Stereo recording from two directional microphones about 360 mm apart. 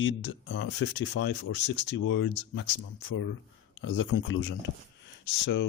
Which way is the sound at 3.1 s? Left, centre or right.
Left.